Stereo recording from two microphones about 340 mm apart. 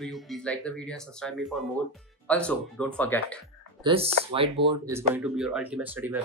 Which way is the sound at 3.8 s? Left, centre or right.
Centre.